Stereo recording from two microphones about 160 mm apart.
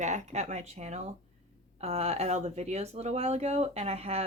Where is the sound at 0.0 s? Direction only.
50° right (ahead or behind).